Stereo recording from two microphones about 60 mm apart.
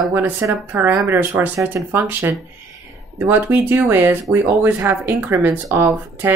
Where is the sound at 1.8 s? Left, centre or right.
Right.